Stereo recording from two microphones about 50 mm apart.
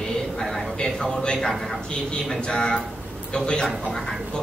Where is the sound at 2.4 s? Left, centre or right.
Centre.